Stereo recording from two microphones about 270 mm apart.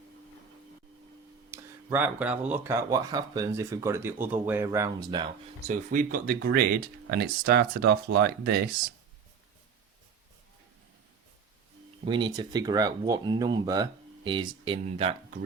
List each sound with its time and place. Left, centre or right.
1.9 s speech: centre
5.6 s speech: right
12.0 s speech: centre